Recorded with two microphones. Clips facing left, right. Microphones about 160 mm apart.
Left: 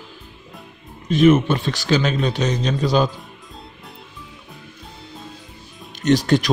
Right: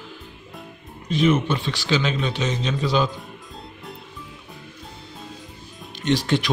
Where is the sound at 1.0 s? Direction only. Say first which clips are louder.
Left 6 dB; 50° left (ahead or behind).